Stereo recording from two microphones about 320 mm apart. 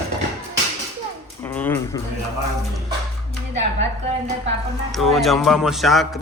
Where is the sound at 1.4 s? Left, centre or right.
Centre.